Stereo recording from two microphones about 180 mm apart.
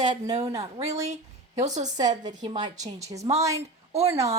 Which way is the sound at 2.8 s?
40° right (ahead or behind).